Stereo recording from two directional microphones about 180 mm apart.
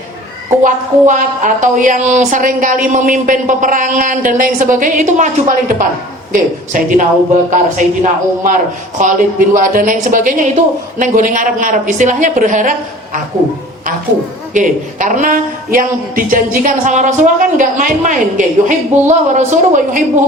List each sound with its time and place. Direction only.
0.6 s a man's voice: 45° right (ahead or behind)
9.6 s a man's voice: 50° right (ahead or behind)
14.5 s a man's voice: 45° right (ahead or behind)